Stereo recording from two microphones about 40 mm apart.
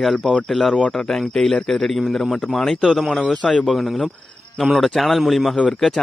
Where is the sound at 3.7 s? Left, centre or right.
Centre.